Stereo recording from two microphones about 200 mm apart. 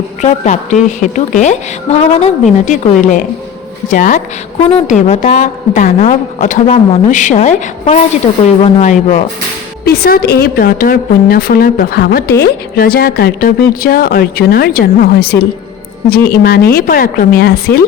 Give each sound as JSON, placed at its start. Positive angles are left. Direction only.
{"t": 0.2, "sound": "a woman's voice", "side_deg": 35}
{"t": 8.3, "sound": "speech", "side_deg": 25}
{"t": 8.6, "sound": "a woman's voice", "side_deg": 35}
{"t": 9.8, "sound": "speech", "side_deg": 50}